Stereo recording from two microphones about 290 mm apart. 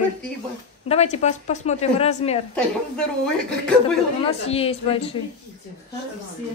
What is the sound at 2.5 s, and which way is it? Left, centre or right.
A woman's voice, centre.